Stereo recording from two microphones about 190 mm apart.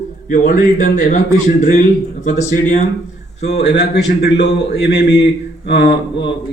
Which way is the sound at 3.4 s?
35° left (ahead or behind).